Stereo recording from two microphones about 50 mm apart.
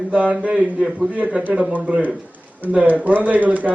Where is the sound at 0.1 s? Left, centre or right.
Right.